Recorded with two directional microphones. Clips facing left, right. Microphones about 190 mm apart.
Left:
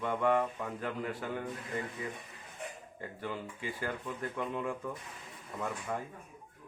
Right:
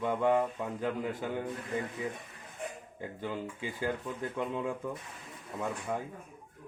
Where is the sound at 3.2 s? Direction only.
15° right (ahead or behind).